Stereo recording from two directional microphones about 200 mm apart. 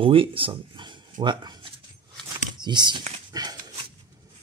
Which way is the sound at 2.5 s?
20° right (ahead or behind).